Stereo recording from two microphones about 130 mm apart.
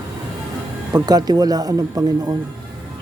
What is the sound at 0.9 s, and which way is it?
Music, 30° right (ahead or behind).